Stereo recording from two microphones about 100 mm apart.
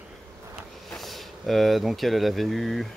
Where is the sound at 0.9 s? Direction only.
Centre (ahead or behind).